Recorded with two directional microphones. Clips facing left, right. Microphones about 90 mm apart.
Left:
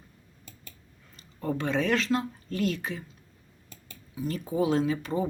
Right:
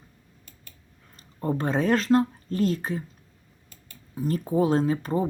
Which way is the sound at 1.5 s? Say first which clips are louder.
Right 3 dB; 40° right (ahead or behind).